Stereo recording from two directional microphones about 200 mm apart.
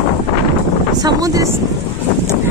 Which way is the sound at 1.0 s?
15° right (ahead or behind).